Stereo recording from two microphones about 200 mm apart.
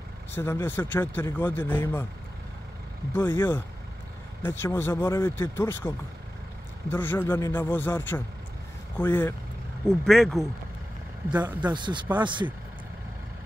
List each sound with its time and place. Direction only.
0.3 s speech: 10° left (ahead or behind)
3.1 s speech: 10° left (ahead or behind)
11.6 s speech: 25° right (ahead or behind)